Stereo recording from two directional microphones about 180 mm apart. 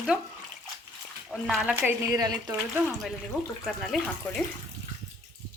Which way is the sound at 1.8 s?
15° right (ahead or behind).